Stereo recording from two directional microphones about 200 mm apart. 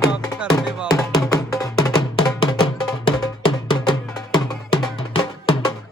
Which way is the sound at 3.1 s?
25° left (ahead or behind).